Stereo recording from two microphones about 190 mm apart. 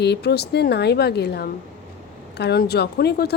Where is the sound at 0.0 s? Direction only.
60° left (ahead or behind).